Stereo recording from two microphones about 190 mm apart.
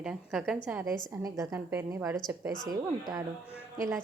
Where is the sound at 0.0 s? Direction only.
Centre (ahead or behind).